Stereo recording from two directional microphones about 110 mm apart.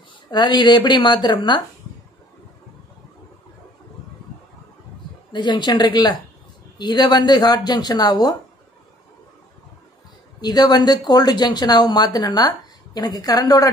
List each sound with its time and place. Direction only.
0.3 s a woman's voice: 45° left (ahead or behind)
5.3 s a woman's voice: 45° left (ahead or behind)
10.4 s speech: 35° left (ahead or behind)